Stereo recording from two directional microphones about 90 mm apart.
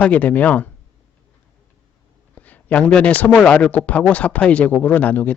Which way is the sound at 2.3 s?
15° left (ahead or behind).